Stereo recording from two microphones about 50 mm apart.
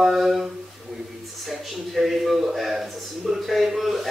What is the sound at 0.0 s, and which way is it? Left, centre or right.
Speech, centre.